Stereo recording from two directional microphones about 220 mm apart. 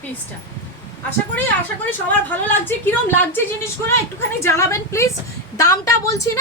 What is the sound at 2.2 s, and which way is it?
A woman's voice, 10° left (ahead or behind).